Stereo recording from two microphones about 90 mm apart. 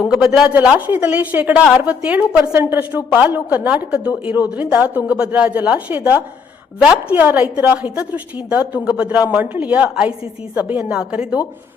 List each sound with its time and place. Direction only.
0.1 s a woman's voice: 5° right (ahead or behind)